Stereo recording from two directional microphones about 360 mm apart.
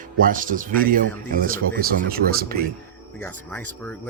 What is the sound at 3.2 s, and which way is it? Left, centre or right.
Speech, centre.